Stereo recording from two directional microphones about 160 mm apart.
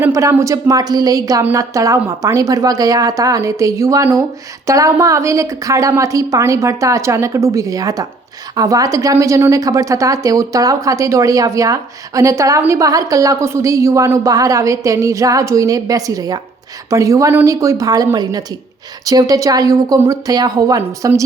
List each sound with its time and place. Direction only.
0.0 s a woman's voice: 20° right (ahead or behind)